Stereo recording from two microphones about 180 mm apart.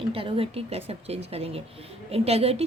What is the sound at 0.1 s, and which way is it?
A woman's voice, 30° right (ahead or behind).